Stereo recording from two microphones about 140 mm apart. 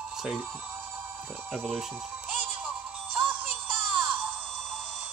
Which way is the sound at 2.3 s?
10° right (ahead or behind).